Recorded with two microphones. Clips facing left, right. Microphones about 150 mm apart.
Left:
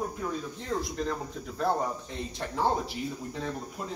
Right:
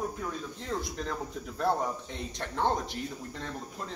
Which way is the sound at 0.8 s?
Centre (ahead or behind).